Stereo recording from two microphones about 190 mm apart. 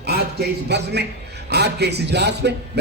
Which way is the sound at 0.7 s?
60° right (ahead or behind).